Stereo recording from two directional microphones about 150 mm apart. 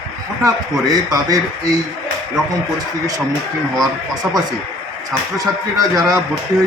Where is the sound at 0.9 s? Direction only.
25° right (ahead or behind).